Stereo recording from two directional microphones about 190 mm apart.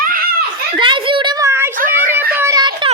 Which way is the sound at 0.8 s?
25° right (ahead or behind).